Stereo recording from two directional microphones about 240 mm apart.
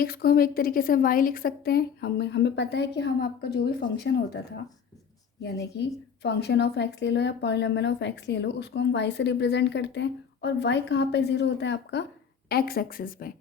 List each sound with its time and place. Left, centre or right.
0.0 s a woman's voice: left
5.4 s a woman's voice: left